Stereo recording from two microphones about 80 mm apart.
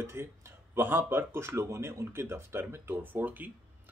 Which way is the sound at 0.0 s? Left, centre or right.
Right.